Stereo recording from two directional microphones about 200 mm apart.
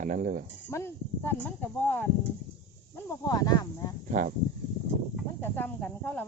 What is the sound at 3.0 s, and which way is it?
Speech, 20° left (ahead or behind).